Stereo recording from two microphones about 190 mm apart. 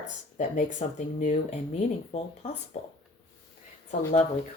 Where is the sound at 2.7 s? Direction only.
35° left (ahead or behind).